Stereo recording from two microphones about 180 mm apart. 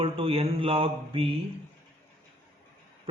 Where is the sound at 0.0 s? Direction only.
30° right (ahead or behind).